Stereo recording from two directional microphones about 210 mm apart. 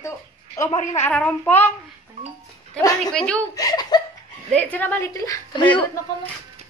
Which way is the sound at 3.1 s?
5° left (ahead or behind).